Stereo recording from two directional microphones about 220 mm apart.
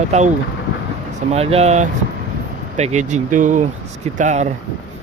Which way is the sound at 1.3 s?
25° right (ahead or behind).